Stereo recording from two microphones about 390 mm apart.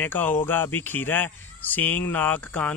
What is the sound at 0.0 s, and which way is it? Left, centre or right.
Speech, centre.